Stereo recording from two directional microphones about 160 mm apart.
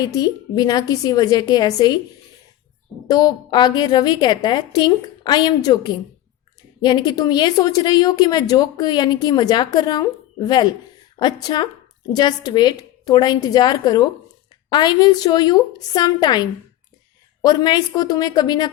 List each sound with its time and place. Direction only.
0.0 s a woman's voice: 25° left (ahead or behind)
3.1 s a woman's voice: 25° left (ahead or behind)